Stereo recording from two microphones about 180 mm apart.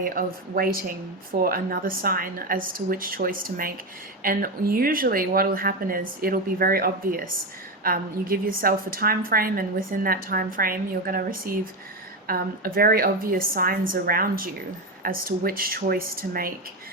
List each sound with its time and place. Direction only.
0.0 s a woman's voice: 55° right (ahead or behind)